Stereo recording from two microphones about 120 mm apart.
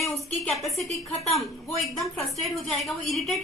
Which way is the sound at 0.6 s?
Centre (ahead or behind).